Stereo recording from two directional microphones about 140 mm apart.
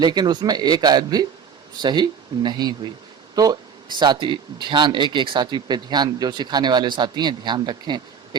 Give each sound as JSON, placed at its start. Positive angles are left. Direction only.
{"t": 0.0, "sound": "a man's voice", "side_deg": -30}